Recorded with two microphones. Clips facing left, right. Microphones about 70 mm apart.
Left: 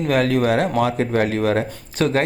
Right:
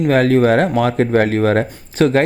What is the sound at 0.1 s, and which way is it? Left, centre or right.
Speech, right.